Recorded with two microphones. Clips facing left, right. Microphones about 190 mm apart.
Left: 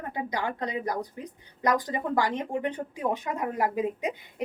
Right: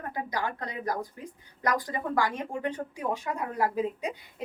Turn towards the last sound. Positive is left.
turn(degrees=20)  # may be behind; listen again after turning